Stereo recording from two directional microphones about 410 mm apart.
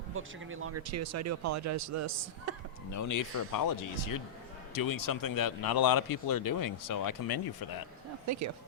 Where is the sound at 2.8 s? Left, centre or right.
Left.